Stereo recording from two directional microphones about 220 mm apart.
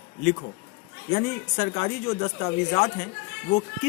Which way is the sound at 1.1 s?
30° left (ahead or behind).